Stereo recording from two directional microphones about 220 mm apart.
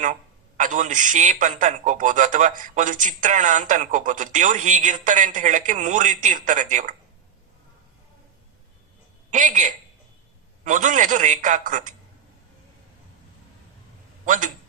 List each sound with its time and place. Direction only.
0.0 s a man's voice: 35° right (ahead or behind)
9.3 s a man's voice: 35° right (ahead or behind)
14.3 s a man's voice: 35° right (ahead or behind)